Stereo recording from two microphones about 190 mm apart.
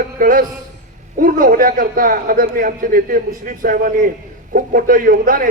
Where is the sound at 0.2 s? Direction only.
45° right (ahead or behind).